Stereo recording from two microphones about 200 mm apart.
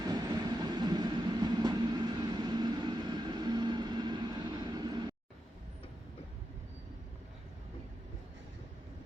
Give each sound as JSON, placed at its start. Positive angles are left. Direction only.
{"t": 0.0, "sound": "train", "side_deg": -20}
{"t": 2.2, "sound": "vehicle", "side_deg": -20}